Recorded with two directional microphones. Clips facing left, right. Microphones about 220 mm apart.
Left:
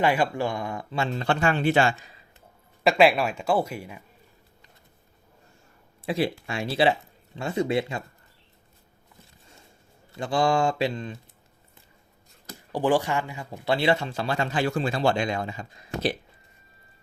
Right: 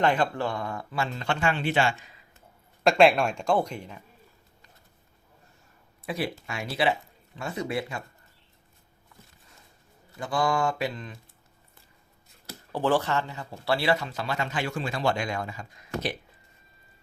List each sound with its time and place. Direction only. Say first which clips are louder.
0.0 s speech: left 1 dB; 10° left (ahead or behind)
1.1 s speech: left 5 dB; 35° left (ahead or behind)
2.8 s speech: even; centre (ahead or behind)
6.1 s speech: left 5 dB; 25° left (ahead or behind)
10.2 s speech: left 3 dB; 25° left (ahead or behind)
12.7 s speech: left 2 dB; 15° left (ahead or behind); by 16.1 s 30° left (ahead or behind)